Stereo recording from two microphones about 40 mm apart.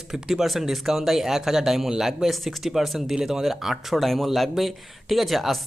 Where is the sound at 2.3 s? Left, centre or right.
Centre.